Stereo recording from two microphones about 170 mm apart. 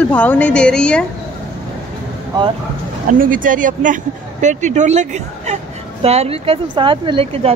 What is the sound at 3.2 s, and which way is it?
Speech, 55° right (ahead or behind).